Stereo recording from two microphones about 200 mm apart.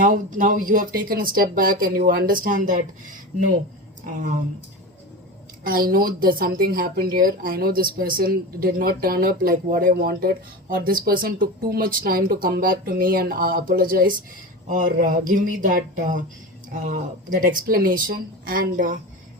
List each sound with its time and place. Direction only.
0.0 s speech: 40° right (ahead or behind)
5.6 s speech: 45° right (ahead or behind)